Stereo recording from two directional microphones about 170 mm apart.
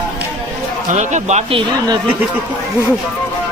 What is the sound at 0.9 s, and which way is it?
Speech, 45° right (ahead or behind).